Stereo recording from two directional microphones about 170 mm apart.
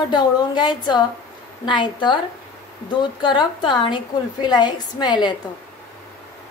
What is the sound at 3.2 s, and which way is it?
A woman's voice, 25° left (ahead or behind).